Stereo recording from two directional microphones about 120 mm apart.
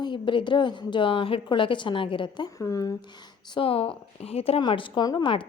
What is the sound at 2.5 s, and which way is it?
A woman's voice, 30° left (ahead or behind).